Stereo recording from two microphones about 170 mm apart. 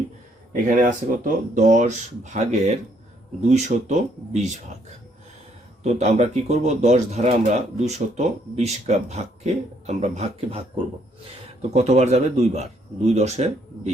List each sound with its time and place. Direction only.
0.5 s speech: 50° right (ahead or behind)
5.8 s speech: 45° right (ahead or behind)
11.7 s speech: 40° right (ahead or behind)